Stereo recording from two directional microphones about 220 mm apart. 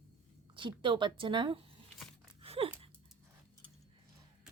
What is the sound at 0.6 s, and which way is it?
A woman's voice, 20° right (ahead or behind).